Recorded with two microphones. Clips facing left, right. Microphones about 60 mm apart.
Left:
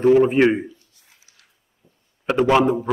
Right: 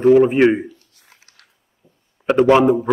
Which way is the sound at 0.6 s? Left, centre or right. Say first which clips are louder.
Right 1 dB; right.